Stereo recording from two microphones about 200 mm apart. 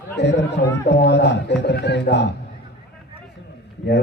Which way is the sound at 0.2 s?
60° left (ahead or behind).